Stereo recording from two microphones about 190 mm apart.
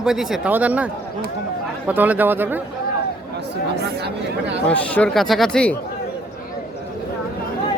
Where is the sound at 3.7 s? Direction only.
60° right (ahead or behind).